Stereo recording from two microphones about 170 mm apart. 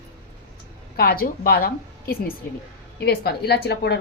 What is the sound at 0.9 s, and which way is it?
A woman's voice, 60° left (ahead or behind).